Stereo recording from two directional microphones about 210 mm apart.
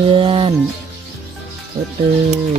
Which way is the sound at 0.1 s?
25° right (ahead or behind).